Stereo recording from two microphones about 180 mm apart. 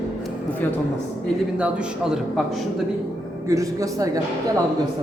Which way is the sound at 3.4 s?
20° right (ahead or behind).